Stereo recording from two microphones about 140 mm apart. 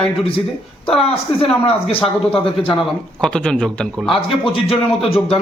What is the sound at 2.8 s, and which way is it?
Speech, 5° left (ahead or behind).